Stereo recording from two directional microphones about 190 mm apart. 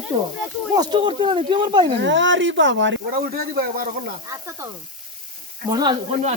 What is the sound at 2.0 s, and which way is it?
Speech, 70° right (ahead or behind).